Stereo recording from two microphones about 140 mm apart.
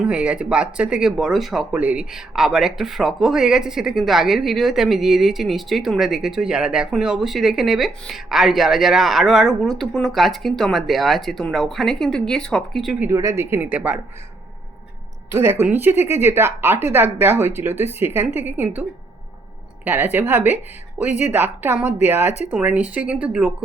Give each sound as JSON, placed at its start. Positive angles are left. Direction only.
{"t": 0.0, "sound": "speech", "side_deg": -5}
{"t": 13.1, "sound": "speech", "side_deg": -20}
{"t": 15.4, "sound": "speech", "side_deg": -15}
{"t": 21.1, "sound": "a woman's voice", "side_deg": 60}
{"t": 21.3, "sound": "speech", "side_deg": -15}